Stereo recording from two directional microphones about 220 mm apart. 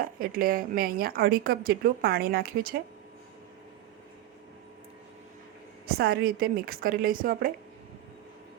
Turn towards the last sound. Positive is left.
turn(degrees=-40)  # may be behind; listen again after turning